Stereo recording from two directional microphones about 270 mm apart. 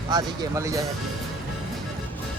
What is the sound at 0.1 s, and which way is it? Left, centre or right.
Speech, centre.